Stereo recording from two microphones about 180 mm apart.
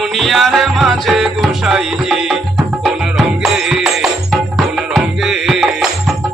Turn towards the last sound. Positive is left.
turn(degrees=-5)  # may be behind; listen again after turning